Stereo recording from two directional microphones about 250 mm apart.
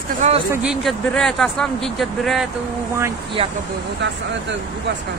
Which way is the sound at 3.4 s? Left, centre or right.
Right.